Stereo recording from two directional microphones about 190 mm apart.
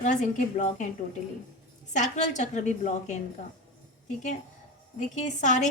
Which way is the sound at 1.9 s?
40° left (ahead or behind).